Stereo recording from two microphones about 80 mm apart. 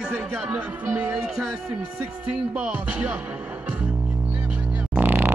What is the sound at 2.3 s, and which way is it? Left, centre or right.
Music, centre.